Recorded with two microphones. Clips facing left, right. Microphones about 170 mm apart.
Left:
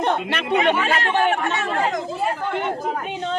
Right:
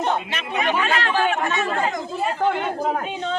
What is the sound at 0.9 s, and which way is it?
Speech, 45° left (ahead or behind).